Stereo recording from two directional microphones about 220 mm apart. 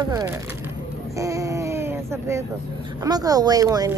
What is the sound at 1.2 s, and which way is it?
Baby cry, 15° right (ahead or behind).